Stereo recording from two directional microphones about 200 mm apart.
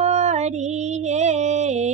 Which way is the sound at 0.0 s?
35° right (ahead or behind).